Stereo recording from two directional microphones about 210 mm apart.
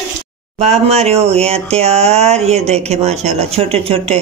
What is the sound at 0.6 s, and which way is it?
Speech, 30° right (ahead or behind).